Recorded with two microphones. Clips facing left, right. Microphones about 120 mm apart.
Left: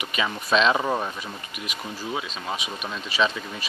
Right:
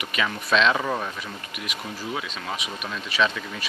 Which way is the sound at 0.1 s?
20° left (ahead or behind).